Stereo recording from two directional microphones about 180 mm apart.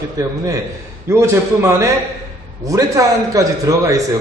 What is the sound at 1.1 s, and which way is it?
A man's voice, 15° right (ahead or behind).